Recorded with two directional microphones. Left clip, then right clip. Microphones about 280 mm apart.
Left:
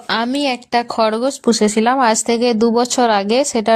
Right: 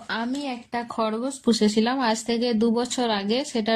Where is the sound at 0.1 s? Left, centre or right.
Left.